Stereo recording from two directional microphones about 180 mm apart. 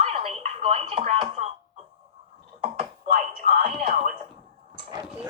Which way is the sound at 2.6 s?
40° right (ahead or behind).